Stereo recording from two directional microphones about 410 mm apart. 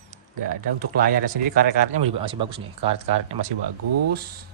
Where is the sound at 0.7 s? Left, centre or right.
Right.